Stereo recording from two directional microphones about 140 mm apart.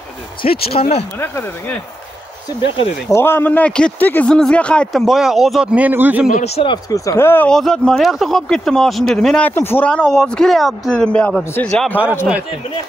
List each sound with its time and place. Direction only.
0.4 s speech: 40° left (ahead or behind)
1.2 s speech: 15° left (ahead or behind)
3.1 s speech: 15° left (ahead or behind); by 6.2 s 10° right (ahead or behind)
6.4 s speech: 50° left (ahead or behind)
6.7 s speech: 25° left (ahead or behind)
7.4 s speech: 5° left (ahead or behind)